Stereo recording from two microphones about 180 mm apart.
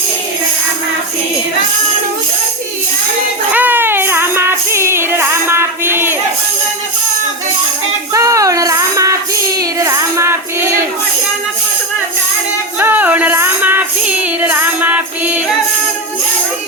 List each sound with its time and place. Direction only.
3.5 s music: 10° right (ahead or behind)
8.1 s child singing: 15° right (ahead or behind)
12.8 s music: 10° right (ahead or behind)